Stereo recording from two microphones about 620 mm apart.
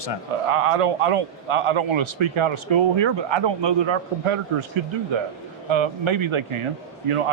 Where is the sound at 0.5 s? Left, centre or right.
Right.